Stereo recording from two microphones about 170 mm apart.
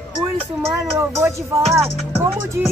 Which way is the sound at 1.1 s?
15° right (ahead or behind).